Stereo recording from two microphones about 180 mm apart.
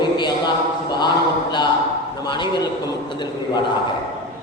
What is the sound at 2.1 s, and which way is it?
A man's voice, 25° left (ahead or behind).